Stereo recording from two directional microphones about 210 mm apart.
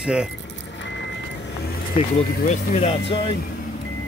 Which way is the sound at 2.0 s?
30° left (ahead or behind).